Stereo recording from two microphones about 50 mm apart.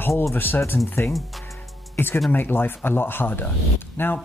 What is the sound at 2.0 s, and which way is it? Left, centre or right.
Speech, left.